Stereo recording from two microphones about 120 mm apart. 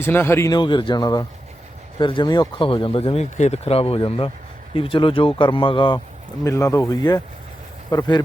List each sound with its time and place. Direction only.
0.0 s speech: 20° left (ahead or behind)
0.5 s speech: 40° left (ahead or behind)
3.2 s speech: 75° left (ahead or behind); by 6.0 s 45° left (ahead or behind)
6.4 s speech: 25° left (ahead or behind)